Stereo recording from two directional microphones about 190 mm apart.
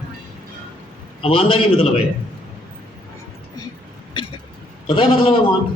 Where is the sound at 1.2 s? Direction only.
30° left (ahead or behind).